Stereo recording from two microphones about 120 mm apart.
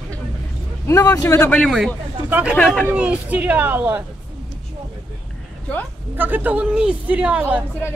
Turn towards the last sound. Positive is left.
turn(degrees=-10)  # may be behind; listen again after turning